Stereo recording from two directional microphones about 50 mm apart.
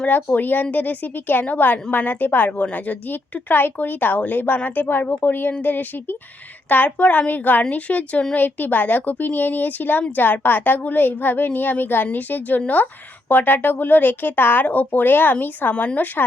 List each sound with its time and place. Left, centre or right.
0.1 s a woman's voice: left